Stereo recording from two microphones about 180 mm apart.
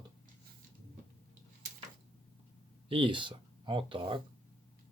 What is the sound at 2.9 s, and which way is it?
Speech, 25° right (ahead or behind).